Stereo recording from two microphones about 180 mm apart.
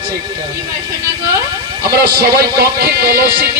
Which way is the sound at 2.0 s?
60° right (ahead or behind).